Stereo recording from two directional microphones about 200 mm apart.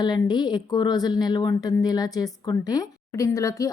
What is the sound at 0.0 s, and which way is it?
A woman's voice, 20° left (ahead or behind).